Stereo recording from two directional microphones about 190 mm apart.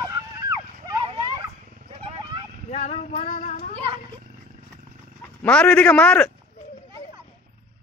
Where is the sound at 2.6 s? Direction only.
35° left (ahead or behind).